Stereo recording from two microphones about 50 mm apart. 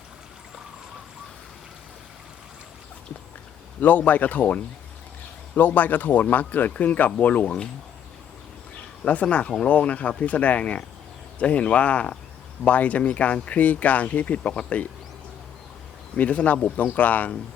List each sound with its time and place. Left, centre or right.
3.8 s speech: left
9.0 s speech: left
16.1 s speech: left